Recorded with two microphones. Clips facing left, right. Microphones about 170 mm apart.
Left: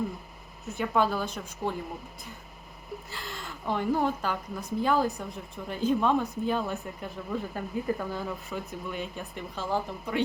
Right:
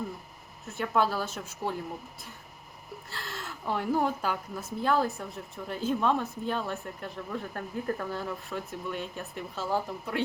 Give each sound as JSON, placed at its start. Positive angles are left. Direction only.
{"t": 0.6, "sound": "speech", "side_deg": 0}
{"t": 3.1, "sound": "speech", "side_deg": 0}